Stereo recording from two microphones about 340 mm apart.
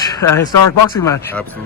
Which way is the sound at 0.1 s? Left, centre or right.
Centre.